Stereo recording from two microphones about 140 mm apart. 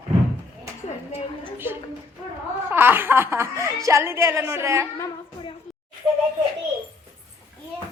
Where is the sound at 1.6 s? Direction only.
15° right (ahead or behind).